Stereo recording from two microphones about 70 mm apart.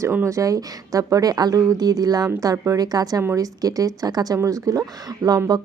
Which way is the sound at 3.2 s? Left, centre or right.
Right.